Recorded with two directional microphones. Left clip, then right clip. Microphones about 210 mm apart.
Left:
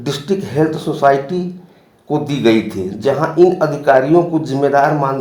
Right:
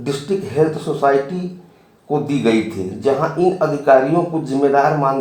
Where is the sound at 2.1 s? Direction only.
45° left (ahead or behind).